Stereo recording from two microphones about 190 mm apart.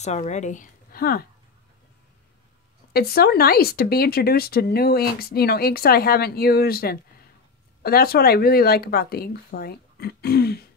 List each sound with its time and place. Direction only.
0.0 s a woman's voice: 35° left (ahead or behind); by 1.2 s 50° left (ahead or behind)
2.9 s speech: 55° left (ahead or behind)